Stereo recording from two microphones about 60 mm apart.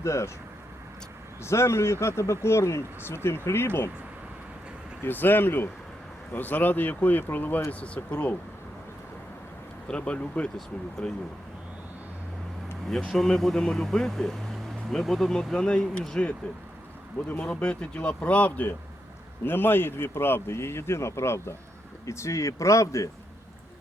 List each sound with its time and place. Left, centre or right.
0.0 s speech: left
1.5 s speech: left
5.0 s speech: left
9.9 s speech: centre
13.1 s speech: centre
17.4 s speech: centre; by 23.0 s left